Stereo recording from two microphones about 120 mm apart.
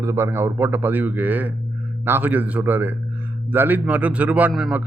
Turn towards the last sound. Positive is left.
turn(degrees=0)  # may be behind; listen again after turning